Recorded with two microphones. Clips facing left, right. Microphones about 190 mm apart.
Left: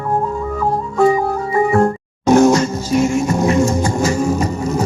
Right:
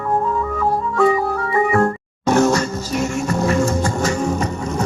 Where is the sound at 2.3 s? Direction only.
15° left (ahead or behind).